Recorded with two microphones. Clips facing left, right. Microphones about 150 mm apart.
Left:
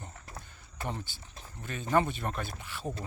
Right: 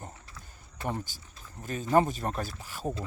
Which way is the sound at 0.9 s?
45° right (ahead or behind).